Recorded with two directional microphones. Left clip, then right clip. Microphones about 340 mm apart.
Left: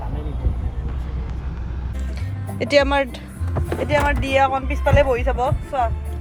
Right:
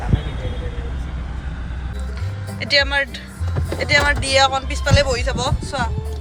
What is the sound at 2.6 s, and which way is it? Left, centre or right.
Speech, centre.